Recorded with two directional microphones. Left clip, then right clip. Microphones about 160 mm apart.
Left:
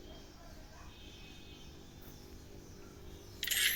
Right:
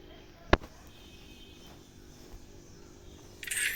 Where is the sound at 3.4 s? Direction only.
35° left (ahead or behind).